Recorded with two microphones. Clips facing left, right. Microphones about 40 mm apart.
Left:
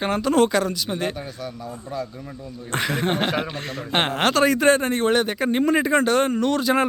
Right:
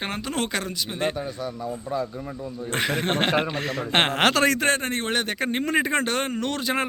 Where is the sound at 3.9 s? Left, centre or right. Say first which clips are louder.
Even; right.